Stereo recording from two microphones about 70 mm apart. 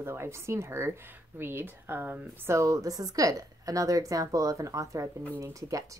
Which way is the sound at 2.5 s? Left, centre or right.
Right.